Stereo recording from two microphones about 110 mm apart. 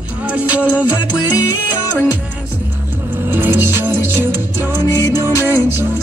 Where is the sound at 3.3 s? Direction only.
20° right (ahead or behind).